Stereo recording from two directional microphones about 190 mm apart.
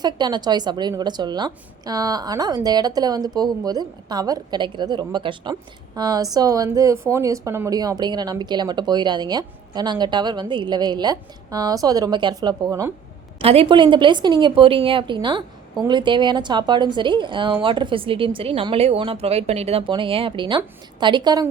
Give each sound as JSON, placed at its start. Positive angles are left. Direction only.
{"t": 0.0, "sound": "a woman's voice", "side_deg": -20}
{"t": 13.4, "sound": "a woman's voice", "side_deg": -30}